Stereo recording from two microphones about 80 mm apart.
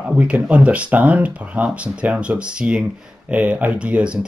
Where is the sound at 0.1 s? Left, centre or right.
Centre.